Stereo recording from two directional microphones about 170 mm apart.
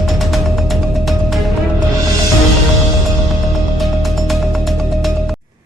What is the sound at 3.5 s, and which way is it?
Music, centre (ahead or behind).